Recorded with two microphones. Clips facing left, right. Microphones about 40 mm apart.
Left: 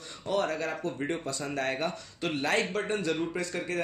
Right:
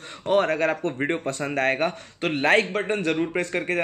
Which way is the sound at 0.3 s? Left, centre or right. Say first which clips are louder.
Right 8 dB; right.